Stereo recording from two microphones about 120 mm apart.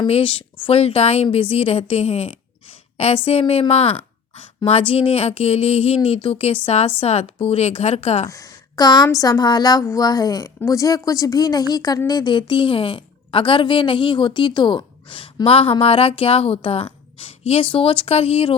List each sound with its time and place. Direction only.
0.1 s a woman's voice: 45° left (ahead or behind)
8.3 s a woman's voice: 30° left (ahead or behind); by 18.5 s 55° left (ahead or behind)